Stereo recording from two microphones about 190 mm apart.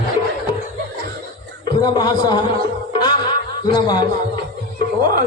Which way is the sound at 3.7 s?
20° left (ahead or behind).